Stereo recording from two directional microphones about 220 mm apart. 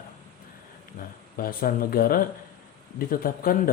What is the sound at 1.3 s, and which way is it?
A man's voice, 40° left (ahead or behind).